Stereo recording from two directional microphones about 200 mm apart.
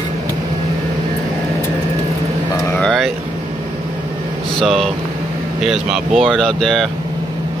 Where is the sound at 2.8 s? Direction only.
Centre (ahead or behind).